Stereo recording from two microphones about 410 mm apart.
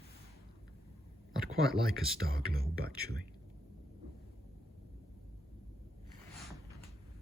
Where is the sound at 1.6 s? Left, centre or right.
Right.